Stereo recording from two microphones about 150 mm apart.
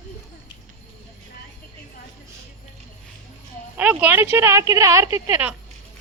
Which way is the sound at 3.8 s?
10° right (ahead or behind).